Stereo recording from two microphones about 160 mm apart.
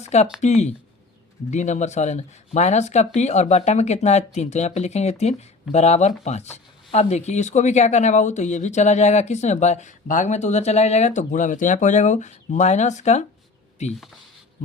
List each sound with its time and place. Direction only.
0.0 s speech: 45° left (ahead or behind)